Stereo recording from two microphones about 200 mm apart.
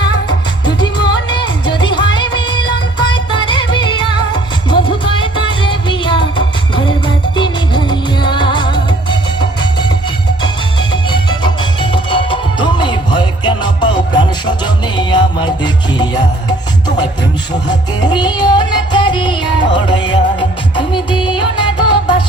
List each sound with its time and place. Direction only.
0.6 s music: 20° left (ahead or behind)
11.1 s music: 20° left (ahead or behind)